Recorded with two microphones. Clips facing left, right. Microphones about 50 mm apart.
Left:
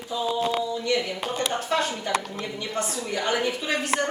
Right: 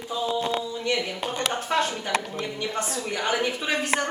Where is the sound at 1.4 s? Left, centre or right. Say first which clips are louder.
Left 1 dB; right.